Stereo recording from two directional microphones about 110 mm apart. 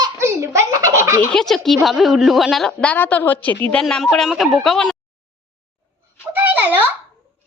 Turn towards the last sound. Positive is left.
turn(degrees=-15)  # may be behind; listen again after turning